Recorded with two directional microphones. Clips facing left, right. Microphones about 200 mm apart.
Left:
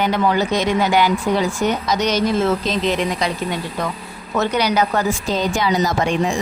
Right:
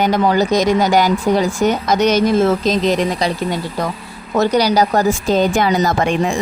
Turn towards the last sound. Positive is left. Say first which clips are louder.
# right 2 dB
turn(degrees=-55)  # may be behind; listen again after turning